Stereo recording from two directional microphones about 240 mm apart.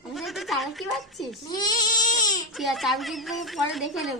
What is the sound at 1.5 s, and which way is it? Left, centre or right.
Baby cry, centre.